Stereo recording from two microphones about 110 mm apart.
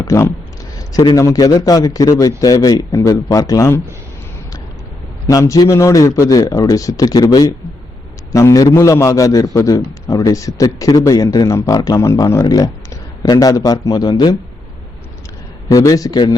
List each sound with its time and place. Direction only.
0.0 s a man's voice: 25° left (ahead or behind)
5.2 s a man's voice: 30° left (ahead or behind)
15.7 s a man's voice: 30° left (ahead or behind)